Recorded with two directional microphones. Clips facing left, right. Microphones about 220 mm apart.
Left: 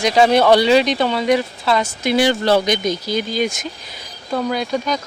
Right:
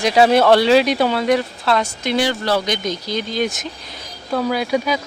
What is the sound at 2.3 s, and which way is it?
Speech, 20° left (ahead or behind).